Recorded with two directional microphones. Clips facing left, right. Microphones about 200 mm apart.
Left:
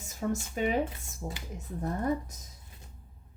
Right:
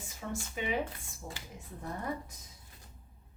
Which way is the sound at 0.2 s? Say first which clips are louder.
Left 8 dB; 45° left (ahead or behind).